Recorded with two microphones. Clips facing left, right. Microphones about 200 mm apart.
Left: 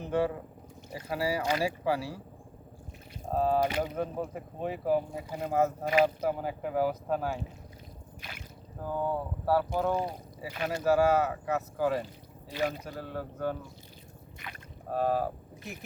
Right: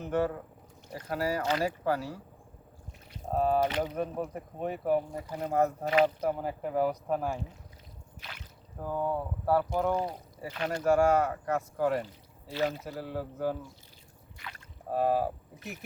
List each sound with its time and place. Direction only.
0.0 s speech: 15° left (ahead or behind)
3.3 s speech: 5° left (ahead or behind)
12.5 s speech: 15° left (ahead or behind)
12.8 s speech: 5° right (ahead or behind)
14.3 s boat: 15° left (ahead or behind)
14.9 s speech: 5° right (ahead or behind)